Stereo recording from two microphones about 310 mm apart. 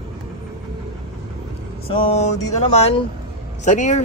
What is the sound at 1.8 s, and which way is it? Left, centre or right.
Speech, centre.